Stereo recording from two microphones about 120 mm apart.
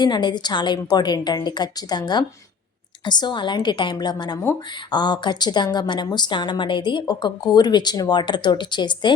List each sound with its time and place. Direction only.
0.0 s a woman's voice: 40° left (ahead or behind)